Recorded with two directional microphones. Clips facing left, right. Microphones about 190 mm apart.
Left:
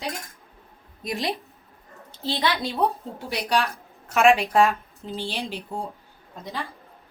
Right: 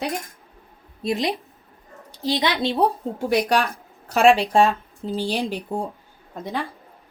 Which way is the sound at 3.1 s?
50° right (ahead or behind).